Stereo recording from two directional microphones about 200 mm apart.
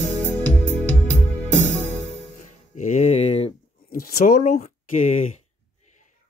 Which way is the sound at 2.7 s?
35° left (ahead or behind).